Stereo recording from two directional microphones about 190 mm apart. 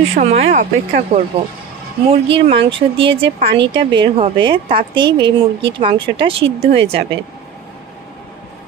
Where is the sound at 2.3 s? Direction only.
30° right (ahead or behind).